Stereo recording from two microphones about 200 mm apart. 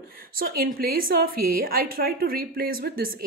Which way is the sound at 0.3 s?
45° right (ahead or behind).